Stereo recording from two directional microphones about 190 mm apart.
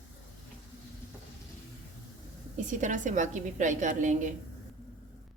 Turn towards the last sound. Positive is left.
turn(degrees=-40)  # may be behind; listen again after turning